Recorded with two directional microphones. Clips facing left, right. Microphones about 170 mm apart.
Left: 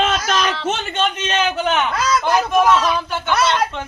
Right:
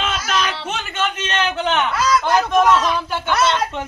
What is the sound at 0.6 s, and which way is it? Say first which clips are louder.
A man's voice: left 3 dB; 20° left (ahead or behind).